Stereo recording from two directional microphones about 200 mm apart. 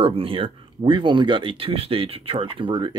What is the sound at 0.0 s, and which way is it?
Speech, 25° right (ahead or behind).